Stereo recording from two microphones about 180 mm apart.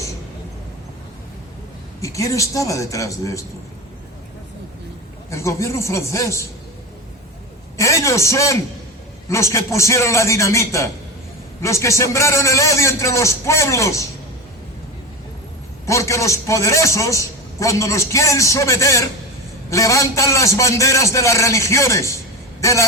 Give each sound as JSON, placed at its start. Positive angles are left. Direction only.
{"t": 2.0, "sound": "a man's voice", "side_deg": 20}
{"t": 5.3, "sound": "a man's voice", "side_deg": 15}
{"t": 7.8, "sound": "a man's voice", "side_deg": 15}
{"t": 15.9, "sound": "a man's voice", "side_deg": 15}